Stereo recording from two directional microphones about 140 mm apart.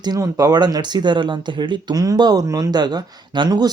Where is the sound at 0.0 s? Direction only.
25° right (ahead or behind).